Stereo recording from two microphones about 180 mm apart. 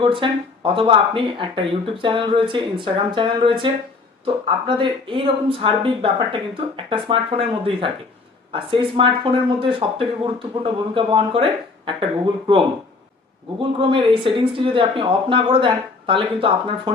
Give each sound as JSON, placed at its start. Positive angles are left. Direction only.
{"t": 0.0, "sound": "speech", "side_deg": -30}